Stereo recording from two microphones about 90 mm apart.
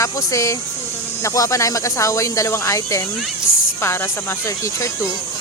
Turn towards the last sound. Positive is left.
turn(degrees=35)  # may be behind; listen again after turning